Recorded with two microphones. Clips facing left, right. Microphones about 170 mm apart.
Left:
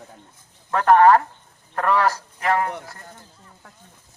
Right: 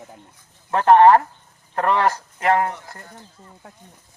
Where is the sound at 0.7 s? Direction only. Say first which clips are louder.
Right 2 dB; 25° right (ahead or behind).